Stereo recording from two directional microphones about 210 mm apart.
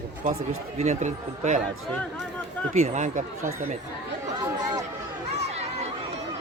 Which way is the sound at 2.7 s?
30° right (ahead or behind).